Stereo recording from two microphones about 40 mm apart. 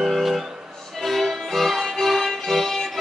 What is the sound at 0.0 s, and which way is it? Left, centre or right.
Music, centre.